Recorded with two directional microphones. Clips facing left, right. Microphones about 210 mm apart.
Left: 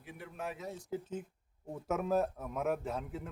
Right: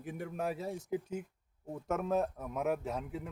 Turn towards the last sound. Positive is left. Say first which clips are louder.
# right 1 dB
turn(degrees=0)  # may be behind; listen again after turning